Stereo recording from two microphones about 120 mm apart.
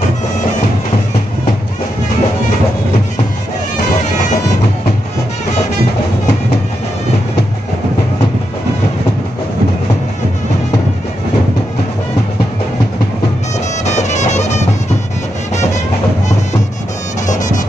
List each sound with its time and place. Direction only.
13.8 s music: 75° left (ahead or behind)